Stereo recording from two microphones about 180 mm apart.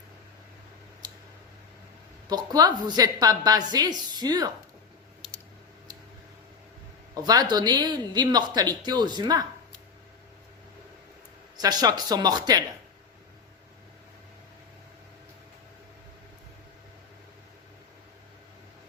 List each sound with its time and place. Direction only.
1.0 s a sound: 20° right (ahead or behind)
2.3 s speech: 20° right (ahead or behind)
7.1 s speech: 20° right (ahead or behind)
11.5 s speech: 20° right (ahead or behind)